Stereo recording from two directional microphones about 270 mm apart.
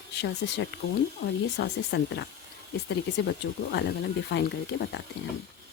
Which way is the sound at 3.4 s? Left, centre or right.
Left.